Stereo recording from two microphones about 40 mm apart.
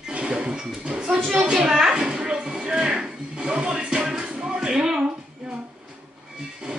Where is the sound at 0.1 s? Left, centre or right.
Right.